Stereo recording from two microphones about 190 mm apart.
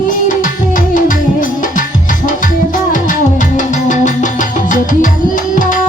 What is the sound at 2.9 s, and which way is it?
Music, 40° left (ahead or behind).